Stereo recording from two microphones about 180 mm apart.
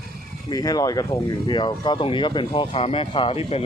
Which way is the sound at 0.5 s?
20° left (ahead or behind).